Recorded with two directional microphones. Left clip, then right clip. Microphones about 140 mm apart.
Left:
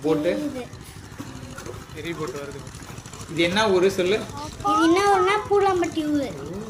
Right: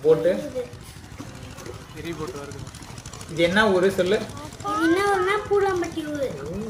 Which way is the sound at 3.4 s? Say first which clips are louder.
Right 1 dB; 40° left (ahead or behind).